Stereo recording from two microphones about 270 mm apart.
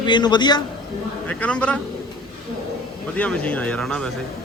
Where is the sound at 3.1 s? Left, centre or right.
Centre.